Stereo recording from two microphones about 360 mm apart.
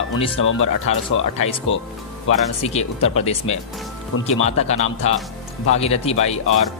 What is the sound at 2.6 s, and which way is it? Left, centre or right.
Speech, centre.